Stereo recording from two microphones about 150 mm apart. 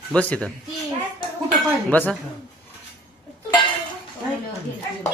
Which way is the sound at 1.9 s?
10° left (ahead or behind).